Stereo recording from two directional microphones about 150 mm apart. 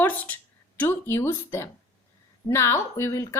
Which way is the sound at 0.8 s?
15° left (ahead or behind).